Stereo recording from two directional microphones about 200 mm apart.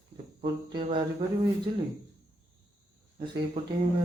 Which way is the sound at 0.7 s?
25° right (ahead or behind).